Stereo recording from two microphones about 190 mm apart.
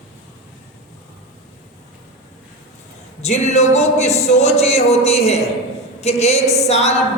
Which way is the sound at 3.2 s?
35° left (ahead or behind).